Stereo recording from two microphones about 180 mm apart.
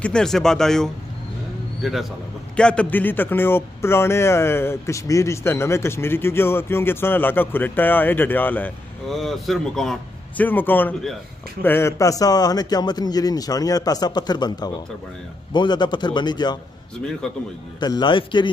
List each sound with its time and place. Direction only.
0.0 s a man's voice: 5° left (ahead or behind); by 16.5 s 25° left (ahead or behind)
17.7 s a man's voice: 25° left (ahead or behind)